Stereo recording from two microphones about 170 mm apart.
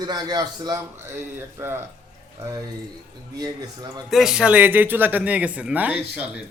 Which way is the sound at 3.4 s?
25° right (ahead or behind).